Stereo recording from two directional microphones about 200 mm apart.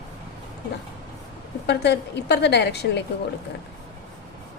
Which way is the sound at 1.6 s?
60° left (ahead or behind).